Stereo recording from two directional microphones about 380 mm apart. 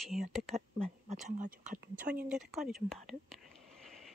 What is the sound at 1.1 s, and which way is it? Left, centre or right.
Speech, centre.